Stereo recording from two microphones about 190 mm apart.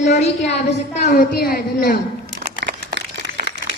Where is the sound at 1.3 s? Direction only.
50° left (ahead or behind).